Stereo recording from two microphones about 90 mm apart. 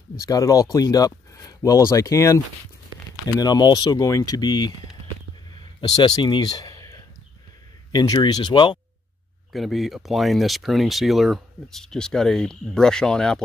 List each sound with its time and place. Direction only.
0.3 s speech: 40° left (ahead or behind)
3.3 s speech: 50° left (ahead or behind)
5.6 s a sound: 50° left (ahead or behind)
7.9 s speech: 50° left (ahead or behind)
9.5 s speech: centre (ahead or behind)